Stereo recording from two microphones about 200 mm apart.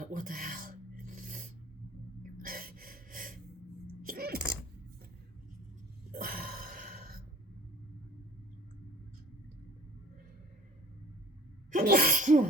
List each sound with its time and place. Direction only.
0.0 s filing: 45° right (ahead or behind)
2.4 s gasp: 45° right (ahead or behind)
4.0 s coin: 45° right (ahead or behind)
6.1 s a sound: 45° right (ahead or behind)
11.7 s sneeze: 45° right (ahead or behind)